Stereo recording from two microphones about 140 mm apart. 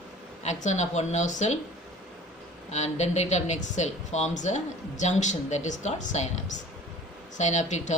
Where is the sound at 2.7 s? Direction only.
55° left (ahead or behind).